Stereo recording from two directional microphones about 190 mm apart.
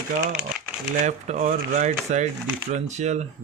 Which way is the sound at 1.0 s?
40° right (ahead or behind).